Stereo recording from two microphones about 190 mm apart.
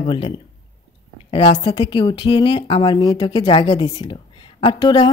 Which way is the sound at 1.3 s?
30° left (ahead or behind).